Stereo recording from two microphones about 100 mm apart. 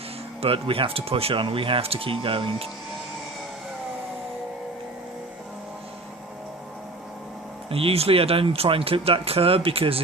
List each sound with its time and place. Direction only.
0.4 s speech: 65° right (ahead or behind)
7.7 s speech: 70° right (ahead or behind)